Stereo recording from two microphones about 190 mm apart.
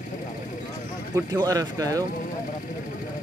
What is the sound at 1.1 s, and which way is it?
Speech, 20° right (ahead or behind).